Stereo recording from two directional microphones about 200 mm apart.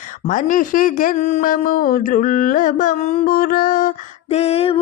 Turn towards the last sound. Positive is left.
turn(degrees=30)  # may be behind; listen again after turning